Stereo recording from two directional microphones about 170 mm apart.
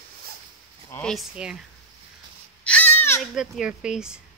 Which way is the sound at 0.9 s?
Centre (ahead or behind).